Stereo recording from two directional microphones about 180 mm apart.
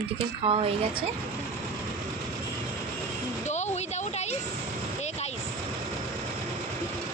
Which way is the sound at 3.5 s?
40° left (ahead or behind).